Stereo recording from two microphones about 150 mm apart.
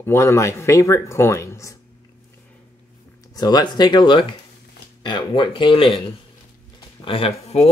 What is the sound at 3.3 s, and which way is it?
Speech, 25° left (ahead or behind).